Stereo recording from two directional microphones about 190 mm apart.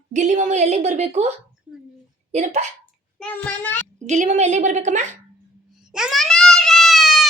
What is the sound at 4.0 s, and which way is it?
A woman's voice, 40° right (ahead or behind).